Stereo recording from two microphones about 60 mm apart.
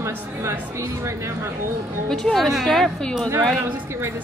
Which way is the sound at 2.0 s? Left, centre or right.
Centre.